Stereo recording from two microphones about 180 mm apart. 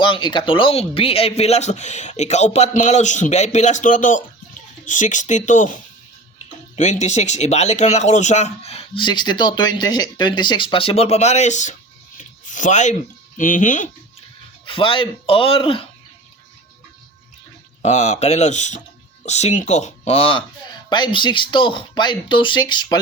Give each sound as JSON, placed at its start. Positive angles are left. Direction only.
{"t": 0.0, "sound": "speech", "side_deg": 25}
{"t": 14.6, "sound": "speech", "side_deg": 30}
{"t": 17.8, "sound": "speech", "side_deg": 40}